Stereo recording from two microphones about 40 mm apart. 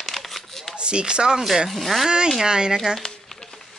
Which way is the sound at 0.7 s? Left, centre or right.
Right.